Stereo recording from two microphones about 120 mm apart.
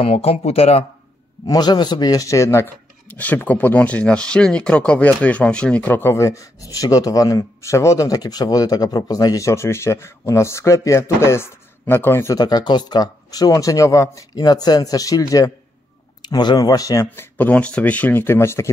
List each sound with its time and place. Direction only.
0.0 s speech: 60° left (ahead or behind)
1.5 s speech: 35° left (ahead or behind)
3.1 s speech: 15° left (ahead or behind)
12.4 s speech: 35° left (ahead or behind)